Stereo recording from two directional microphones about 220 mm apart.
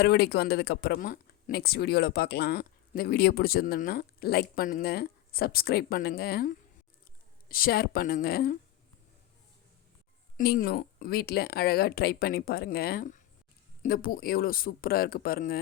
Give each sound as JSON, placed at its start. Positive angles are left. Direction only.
{"t": 0.0, "sound": "speech", "side_deg": 45}
{"t": 10.3, "sound": "speech", "side_deg": 40}